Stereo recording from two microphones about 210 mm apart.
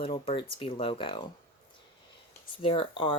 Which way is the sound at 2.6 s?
25° left (ahead or behind).